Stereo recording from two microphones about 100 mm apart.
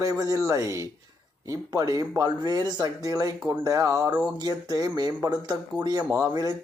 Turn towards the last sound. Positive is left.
turn(degrees=-40)  # may be behind; listen again after turning